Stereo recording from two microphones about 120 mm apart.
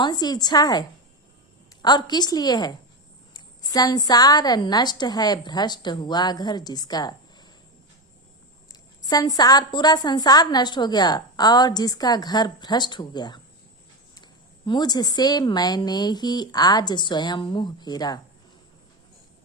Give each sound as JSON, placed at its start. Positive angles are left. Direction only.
{"t": 0.0, "sound": "a woman's voice", "side_deg": 35}
{"t": 9.0, "sound": "a woman's voice", "side_deg": 30}